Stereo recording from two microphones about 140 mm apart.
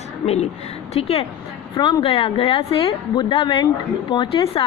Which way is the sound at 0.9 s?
45° left (ahead or behind).